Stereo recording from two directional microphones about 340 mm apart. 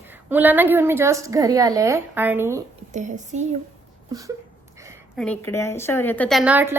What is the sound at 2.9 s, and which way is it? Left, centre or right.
A woman's voice, right.